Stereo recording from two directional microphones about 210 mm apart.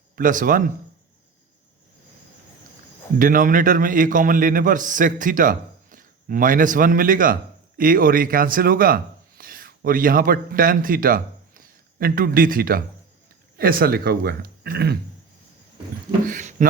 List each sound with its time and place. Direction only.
0.2 s a man's voice: 40° right (ahead or behind)
3.2 s a man's voice: 40° right (ahead or behind)
16.2 s a sound: 40° right (ahead or behind)